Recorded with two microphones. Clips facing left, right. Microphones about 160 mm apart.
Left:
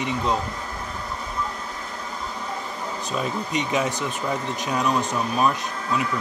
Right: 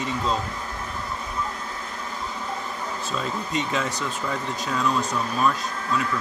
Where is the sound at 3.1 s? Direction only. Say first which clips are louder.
Left 2 dB; 20° left (ahead or behind).